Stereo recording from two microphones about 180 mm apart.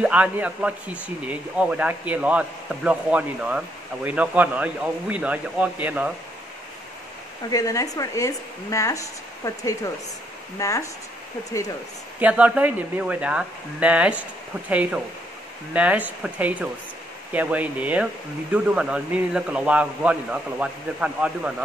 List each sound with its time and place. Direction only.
0.0 s speech: 10° right (ahead or behind)
7.4 s speech: 20° left (ahead or behind)
12.2 s speech: 10° right (ahead or behind)